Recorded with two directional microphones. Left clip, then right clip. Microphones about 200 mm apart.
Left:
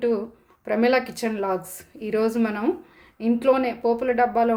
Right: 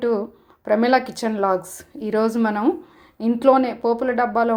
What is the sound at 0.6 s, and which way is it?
A woman's voice, 20° right (ahead or behind).